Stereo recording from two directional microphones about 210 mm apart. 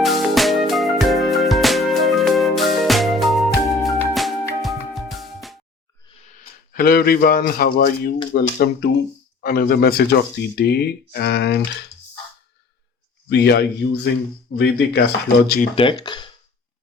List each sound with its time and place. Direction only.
0.0 s music: centre (ahead or behind)
6.7 s speech: 45° left (ahead or behind)
13.2 s speech: 55° left (ahead or behind)
15.7 s speech: 25° left (ahead or behind)